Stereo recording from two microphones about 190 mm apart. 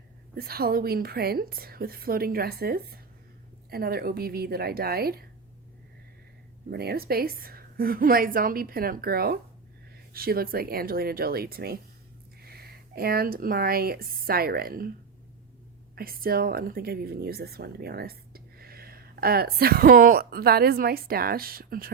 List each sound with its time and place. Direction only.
0.3 s a woman's voice: 55° right (ahead or behind)
6.7 s a woman's voice: 55° right (ahead or behind)
16.0 s a woman's voice: 50° right (ahead or behind)